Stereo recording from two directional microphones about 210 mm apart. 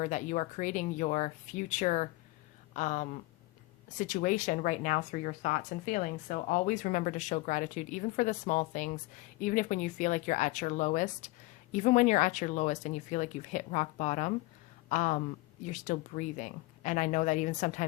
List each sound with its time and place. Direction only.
0.0 s speech: 35° left (ahead or behind)